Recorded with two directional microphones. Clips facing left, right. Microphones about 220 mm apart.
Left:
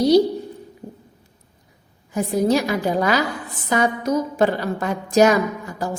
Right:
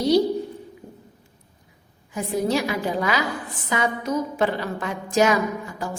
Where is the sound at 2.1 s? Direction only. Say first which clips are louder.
Left 4 dB; 40° left (ahead or behind).